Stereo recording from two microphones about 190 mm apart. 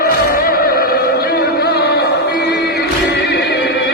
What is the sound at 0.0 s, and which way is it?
Music, 50° left (ahead or behind).